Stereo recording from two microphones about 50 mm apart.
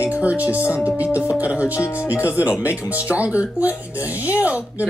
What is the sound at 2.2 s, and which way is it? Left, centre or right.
Speech, right.